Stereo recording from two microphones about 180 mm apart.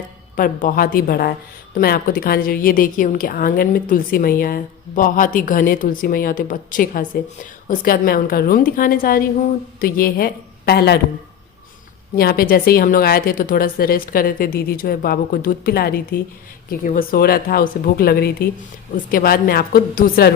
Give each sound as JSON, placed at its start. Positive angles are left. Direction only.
{"t": 0.3, "sound": "a woman's voice", "side_deg": 50}
{"t": 12.1, "sound": "a woman's voice", "side_deg": 60}